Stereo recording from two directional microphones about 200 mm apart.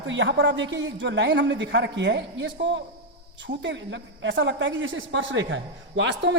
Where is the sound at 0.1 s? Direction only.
65° right (ahead or behind).